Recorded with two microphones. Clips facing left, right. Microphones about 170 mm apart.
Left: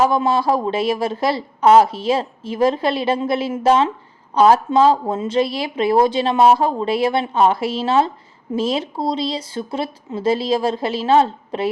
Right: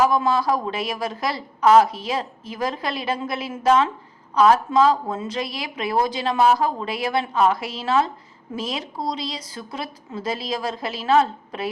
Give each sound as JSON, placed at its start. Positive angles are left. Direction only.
{"t": 0.0, "sound": "speech", "side_deg": 25}